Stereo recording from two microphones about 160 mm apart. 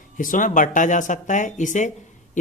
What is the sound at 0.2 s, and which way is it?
Speech, 55° left (ahead or behind).